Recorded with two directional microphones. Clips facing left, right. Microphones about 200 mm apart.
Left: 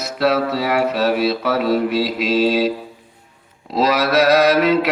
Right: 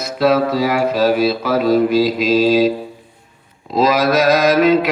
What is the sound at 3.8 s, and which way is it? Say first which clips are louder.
Mantra: right 2 dB; 65° left (ahead or behind).